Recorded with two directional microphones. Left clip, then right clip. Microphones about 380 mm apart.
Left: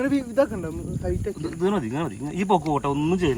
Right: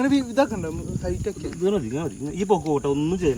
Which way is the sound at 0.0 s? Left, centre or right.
Right.